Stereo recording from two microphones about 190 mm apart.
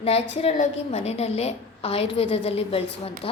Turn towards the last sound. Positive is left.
turn(degrees=30)  # may be behind; listen again after turning